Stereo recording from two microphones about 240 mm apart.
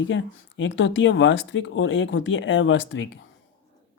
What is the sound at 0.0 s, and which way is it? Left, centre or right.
Speech, left.